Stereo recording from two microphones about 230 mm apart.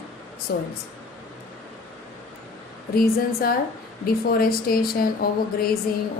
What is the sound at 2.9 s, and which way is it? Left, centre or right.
Speech, left.